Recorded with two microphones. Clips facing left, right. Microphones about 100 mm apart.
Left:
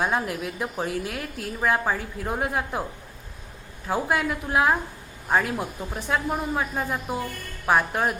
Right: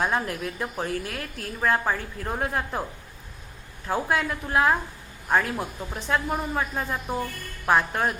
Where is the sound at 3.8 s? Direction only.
10° left (ahead or behind).